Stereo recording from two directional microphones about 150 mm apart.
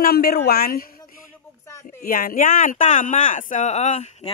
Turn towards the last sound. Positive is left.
turn(degrees=50)  # may be behind; listen again after turning